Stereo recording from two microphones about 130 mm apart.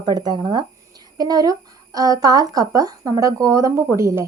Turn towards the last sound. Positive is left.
turn(degrees=-20)  # may be behind; listen again after turning